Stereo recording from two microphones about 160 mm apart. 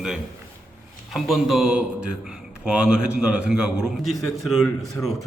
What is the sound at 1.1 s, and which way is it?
A man's voice, centre (ahead or behind).